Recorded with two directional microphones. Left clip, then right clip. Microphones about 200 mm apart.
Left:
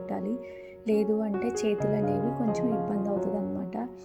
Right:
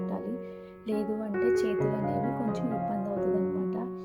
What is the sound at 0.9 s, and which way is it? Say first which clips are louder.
Speech: left 5 dB; 15° left (ahead or behind).